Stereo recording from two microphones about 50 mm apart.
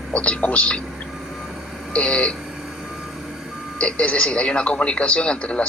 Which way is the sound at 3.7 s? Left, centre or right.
Left.